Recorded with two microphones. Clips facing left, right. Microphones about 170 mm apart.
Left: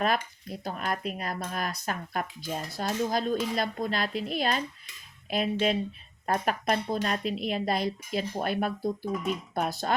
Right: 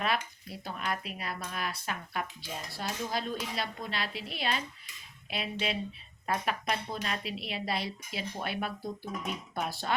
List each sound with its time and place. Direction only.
0.0 s cutlery: 45° left (ahead or behind)